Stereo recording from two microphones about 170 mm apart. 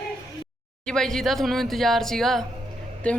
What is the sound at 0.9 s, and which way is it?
A woman's voice, 5° left (ahead or behind).